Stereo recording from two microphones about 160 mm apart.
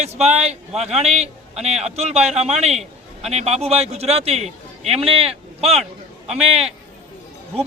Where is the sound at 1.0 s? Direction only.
40° right (ahead or behind).